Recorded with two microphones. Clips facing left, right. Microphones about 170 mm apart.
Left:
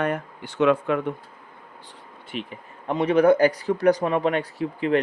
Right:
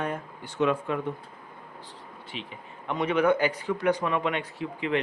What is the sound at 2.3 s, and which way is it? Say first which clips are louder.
Speech: left 7 dB; 55° left (ahead or behind).